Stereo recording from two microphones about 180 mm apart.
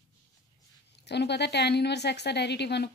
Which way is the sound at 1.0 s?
70° left (ahead or behind).